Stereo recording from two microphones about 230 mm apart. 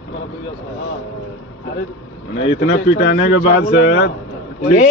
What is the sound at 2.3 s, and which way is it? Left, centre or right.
A man's voice, left.